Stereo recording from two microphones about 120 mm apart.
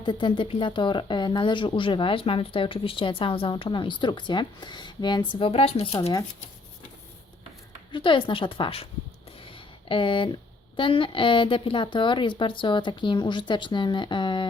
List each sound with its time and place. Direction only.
0.0 s speech: 40° left (ahead or behind)
7.9 s speech: 45° left (ahead or behind)
9.4 s a sound: 45° left (ahead or behind)
10.8 s a woman's voice: 45° left (ahead or behind)